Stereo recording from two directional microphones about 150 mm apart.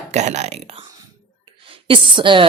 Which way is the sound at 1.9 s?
35° right (ahead or behind).